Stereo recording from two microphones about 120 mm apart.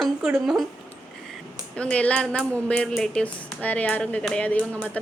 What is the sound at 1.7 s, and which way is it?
A woman's voice, 10° left (ahead or behind).